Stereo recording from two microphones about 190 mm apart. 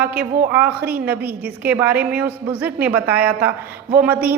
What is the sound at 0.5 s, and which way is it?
A woman's voice, 10° right (ahead or behind).